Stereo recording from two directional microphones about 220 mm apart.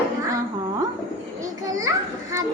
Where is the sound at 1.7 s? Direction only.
15° right (ahead or behind).